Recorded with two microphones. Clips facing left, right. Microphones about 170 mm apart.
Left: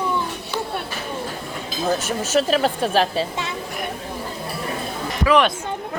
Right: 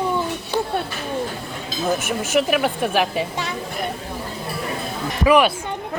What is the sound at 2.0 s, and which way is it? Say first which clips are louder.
A woman's voice: even; 15° right (ahead or behind).